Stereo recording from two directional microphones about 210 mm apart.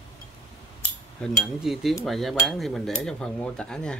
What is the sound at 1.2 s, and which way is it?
Cutlery, centre (ahead or behind).